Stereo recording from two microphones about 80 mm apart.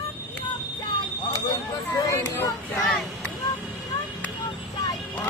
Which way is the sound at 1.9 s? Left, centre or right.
Left.